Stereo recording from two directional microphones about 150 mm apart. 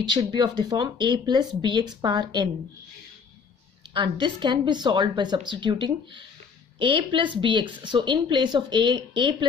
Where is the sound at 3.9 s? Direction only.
30° right (ahead or behind).